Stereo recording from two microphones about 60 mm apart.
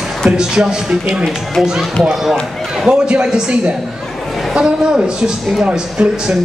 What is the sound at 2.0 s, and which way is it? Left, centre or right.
Speech, centre.